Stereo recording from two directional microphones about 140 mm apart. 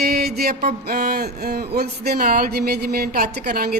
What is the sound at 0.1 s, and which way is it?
A woman's voice, 90° right.